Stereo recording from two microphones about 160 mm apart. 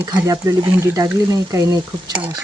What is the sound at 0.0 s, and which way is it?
Speech, 20° right (ahead or behind).